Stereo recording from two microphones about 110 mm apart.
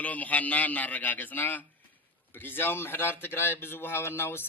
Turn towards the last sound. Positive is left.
turn(degrees=20)  # may be behind; listen again after turning